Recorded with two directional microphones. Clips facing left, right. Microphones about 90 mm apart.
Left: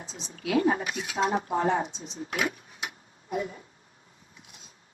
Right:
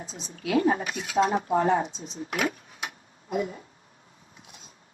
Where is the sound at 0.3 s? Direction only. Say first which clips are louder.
Right 1 dB; 35° right (ahead or behind).